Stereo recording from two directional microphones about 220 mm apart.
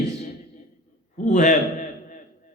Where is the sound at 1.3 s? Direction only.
35° left (ahead or behind).